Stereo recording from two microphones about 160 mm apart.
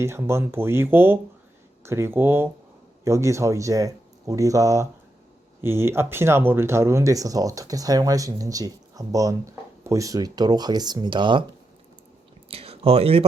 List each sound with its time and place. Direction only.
0.0 s speech: 15° right (ahead or behind)
12.5 s speech: 35° right (ahead or behind)